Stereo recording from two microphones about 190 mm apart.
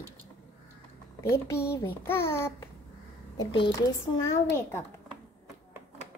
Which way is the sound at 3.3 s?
25° left (ahead or behind).